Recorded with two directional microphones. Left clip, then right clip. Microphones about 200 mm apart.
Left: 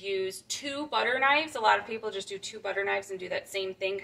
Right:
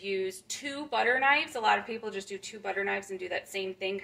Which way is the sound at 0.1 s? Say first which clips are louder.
Left 1 dB; 20° right (ahead or behind).